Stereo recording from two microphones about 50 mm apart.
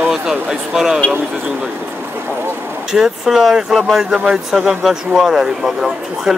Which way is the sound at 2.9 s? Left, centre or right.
Centre.